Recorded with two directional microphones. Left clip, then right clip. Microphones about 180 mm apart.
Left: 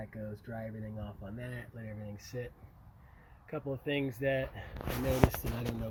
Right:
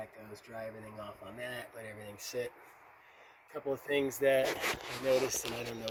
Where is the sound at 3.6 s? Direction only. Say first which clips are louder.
Right 4 dB; 25° right (ahead or behind).